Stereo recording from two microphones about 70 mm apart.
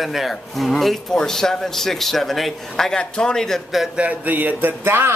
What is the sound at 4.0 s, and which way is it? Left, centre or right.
Speech, right.